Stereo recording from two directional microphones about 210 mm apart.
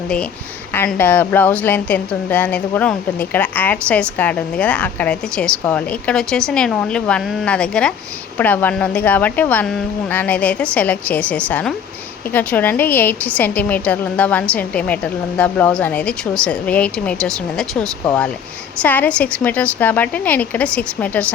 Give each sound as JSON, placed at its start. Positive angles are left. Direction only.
{"t": 0.7, "sound": "a woman's voice", "side_deg": 10}